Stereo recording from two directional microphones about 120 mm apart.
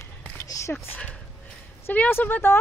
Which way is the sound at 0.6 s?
30° left (ahead or behind).